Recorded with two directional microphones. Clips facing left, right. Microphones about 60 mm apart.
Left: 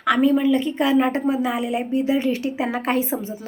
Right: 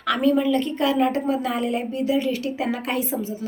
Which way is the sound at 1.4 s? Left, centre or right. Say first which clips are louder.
Left 1 dB; centre.